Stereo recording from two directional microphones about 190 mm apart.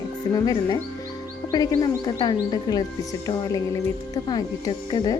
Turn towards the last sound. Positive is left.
turn(degrees=20)  # may be behind; listen again after turning